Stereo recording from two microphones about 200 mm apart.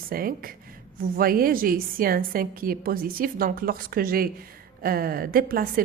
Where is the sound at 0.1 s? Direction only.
45° right (ahead or behind).